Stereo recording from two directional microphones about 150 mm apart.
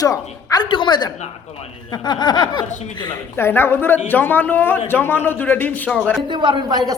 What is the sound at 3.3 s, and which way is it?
A man's voice, 15° left (ahead or behind).